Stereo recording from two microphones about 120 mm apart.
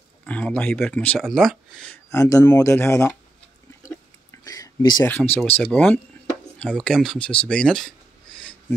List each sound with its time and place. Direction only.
0.3 s speech: 10° left (ahead or behind)
1.2 s speech: centre (ahead or behind)
2.0 s speech: 25° left (ahead or behind)
4.3 s a sound: 30° left (ahead or behind)
5.0 s speech: 15° left (ahead or behind)